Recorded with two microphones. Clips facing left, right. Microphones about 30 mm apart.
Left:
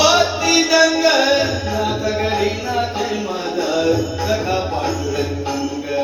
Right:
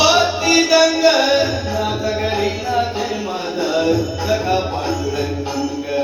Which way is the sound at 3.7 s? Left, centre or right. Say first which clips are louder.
Right 1 dB; centre.